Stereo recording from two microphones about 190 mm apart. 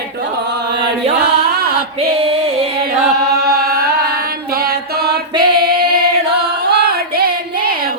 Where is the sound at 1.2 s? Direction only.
55° right (ahead or behind).